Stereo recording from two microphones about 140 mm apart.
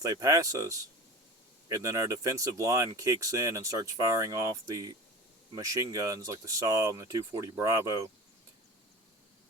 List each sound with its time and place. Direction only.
0.0 s speech: 25° right (ahead or behind)